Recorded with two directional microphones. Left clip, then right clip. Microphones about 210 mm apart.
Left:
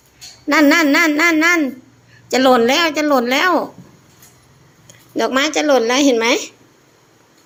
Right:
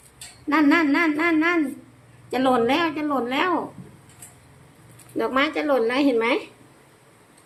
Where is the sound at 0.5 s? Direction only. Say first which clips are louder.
Left 7 dB; 40° left (ahead or behind).